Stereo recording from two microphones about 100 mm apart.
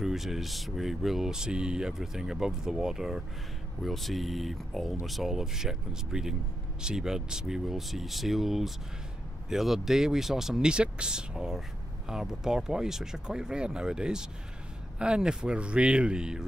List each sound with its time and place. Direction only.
0.0 s speech: 5° right (ahead or behind)